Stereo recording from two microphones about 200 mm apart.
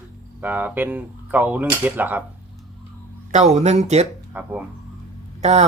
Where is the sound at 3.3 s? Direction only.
35° right (ahead or behind).